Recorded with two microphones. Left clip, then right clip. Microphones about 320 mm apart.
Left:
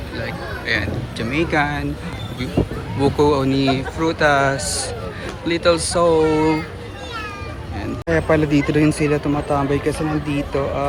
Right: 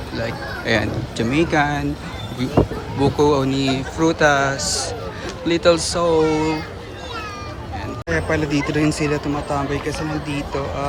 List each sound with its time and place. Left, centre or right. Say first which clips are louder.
0.7 s speech: right 2 dB; centre
3.0 s speech: even; centre
8.1 s speech: left 4 dB; centre